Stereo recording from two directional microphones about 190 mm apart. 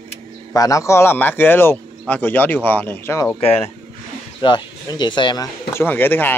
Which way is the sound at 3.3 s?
30° left (ahead or behind).